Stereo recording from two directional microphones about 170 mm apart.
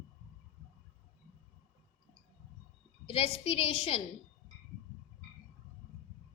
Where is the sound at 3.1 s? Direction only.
35° left (ahead or behind).